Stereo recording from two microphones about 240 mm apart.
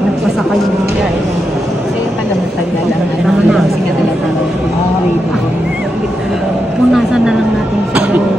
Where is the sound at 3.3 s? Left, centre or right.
Centre.